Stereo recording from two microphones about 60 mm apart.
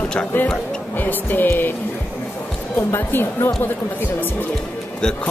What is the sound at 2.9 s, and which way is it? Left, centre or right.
Speech, left.